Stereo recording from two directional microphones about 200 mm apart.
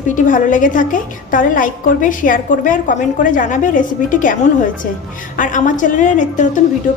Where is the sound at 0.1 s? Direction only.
40° left (ahead or behind).